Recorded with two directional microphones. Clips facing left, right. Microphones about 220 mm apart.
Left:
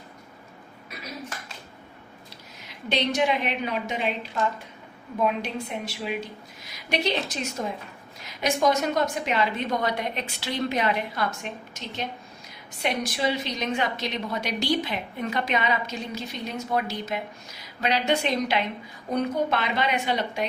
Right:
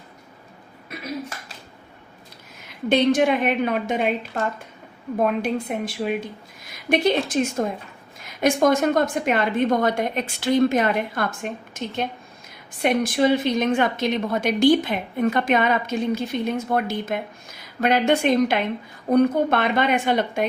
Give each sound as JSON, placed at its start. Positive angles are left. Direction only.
{"t": 2.6, "sound": "a woman's voice", "side_deg": -50}
{"t": 5.2, "sound": "a woman's voice", "side_deg": -50}